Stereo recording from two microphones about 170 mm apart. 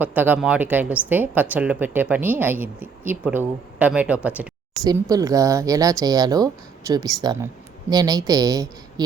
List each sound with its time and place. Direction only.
0.0 s a woman's voice: 10° right (ahead or behind)
4.8 s speech: 20° right (ahead or behind)